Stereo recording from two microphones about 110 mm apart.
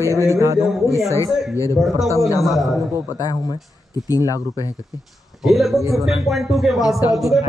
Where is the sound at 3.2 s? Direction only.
35° left (ahead or behind).